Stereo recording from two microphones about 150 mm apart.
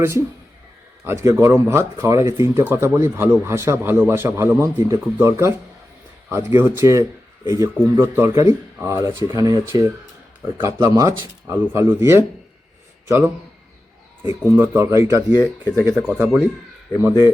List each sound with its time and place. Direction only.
1.0 s a man's voice: 20° right (ahead or behind)
14.4 s speech: 15° right (ahead or behind)